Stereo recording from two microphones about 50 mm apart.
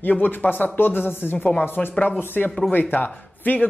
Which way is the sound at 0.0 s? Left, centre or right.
Left.